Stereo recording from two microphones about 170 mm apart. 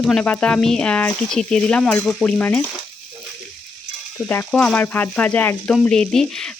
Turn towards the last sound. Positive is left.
turn(degrees=5)  # may be behind; listen again after turning